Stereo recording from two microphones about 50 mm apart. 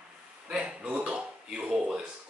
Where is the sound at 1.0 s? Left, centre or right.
Right.